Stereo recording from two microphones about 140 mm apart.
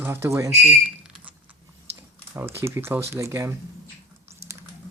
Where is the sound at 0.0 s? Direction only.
15° right (ahead or behind).